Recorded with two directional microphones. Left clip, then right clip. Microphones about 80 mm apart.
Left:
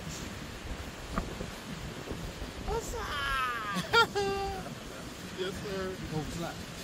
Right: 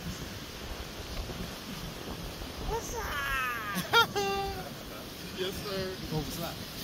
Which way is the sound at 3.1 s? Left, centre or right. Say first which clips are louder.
Even; centre.